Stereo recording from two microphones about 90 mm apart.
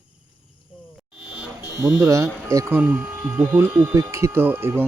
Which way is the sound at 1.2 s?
5° right (ahead or behind).